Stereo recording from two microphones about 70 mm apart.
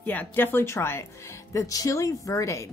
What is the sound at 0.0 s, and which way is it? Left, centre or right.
Speech, left.